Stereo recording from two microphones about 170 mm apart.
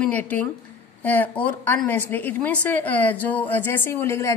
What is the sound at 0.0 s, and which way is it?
A woman's voice, 10° left (ahead or behind).